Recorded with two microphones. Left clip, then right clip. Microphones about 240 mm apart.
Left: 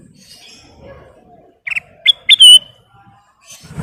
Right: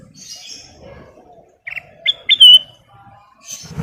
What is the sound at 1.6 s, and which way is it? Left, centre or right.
Bird, left.